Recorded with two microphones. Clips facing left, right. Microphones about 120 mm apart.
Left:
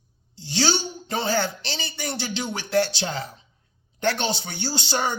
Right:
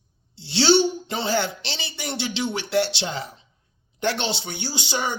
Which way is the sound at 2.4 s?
40° left (ahead or behind).